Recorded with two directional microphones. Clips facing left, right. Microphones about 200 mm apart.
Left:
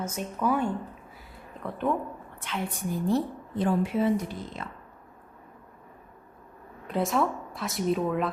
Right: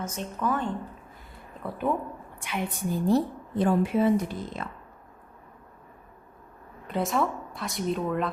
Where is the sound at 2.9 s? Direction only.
35° right (ahead or behind).